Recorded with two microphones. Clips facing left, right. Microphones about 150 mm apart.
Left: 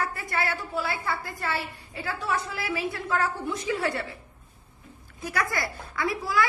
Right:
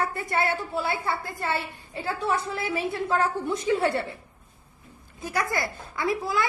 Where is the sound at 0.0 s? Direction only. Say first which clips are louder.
Right 3 dB; 25° right (ahead or behind).